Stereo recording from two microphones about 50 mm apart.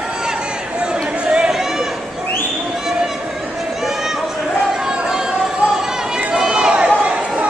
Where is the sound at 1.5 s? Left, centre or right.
Centre.